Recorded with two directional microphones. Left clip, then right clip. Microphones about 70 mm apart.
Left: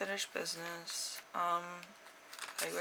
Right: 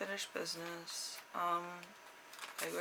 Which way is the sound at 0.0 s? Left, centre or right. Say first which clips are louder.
Left 3 dB; left.